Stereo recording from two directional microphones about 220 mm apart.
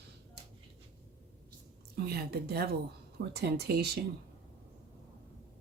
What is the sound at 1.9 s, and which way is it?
Speech, 45° right (ahead or behind).